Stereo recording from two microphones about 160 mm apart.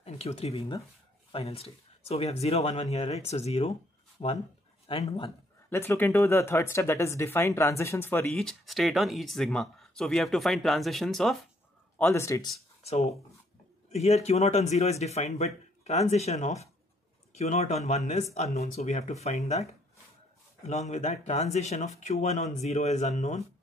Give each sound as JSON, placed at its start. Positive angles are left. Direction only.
{"t": 0.0, "sound": "speech", "side_deg": 40}
{"t": 5.7, "sound": "speech", "side_deg": 15}
{"t": 8.3, "sound": "speech", "side_deg": 0}
{"t": 12.0, "sound": "speech", "side_deg": 15}
{"t": 12.8, "sound": "speech", "side_deg": 45}